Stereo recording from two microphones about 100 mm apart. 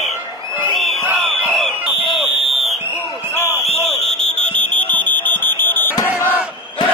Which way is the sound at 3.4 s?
30° left (ahead or behind).